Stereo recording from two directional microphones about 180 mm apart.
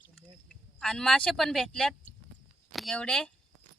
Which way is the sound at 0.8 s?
5° left (ahead or behind).